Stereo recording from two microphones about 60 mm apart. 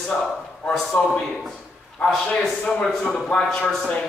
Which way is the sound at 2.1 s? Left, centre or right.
Centre.